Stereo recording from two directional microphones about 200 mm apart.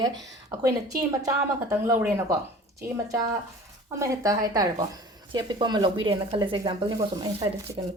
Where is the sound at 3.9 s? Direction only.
15° right (ahead or behind).